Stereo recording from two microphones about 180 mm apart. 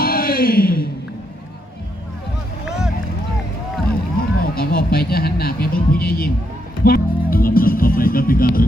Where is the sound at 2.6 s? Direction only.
5° right (ahead or behind).